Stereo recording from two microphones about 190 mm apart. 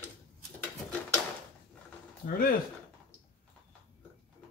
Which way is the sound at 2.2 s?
50° left (ahead or behind).